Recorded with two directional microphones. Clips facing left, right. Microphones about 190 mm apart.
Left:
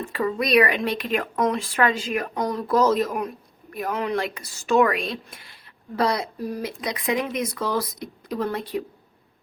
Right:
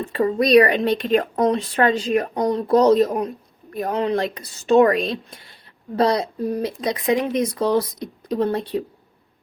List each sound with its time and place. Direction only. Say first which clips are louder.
0.1 s speech: right 6 dB; 30° right (ahead or behind)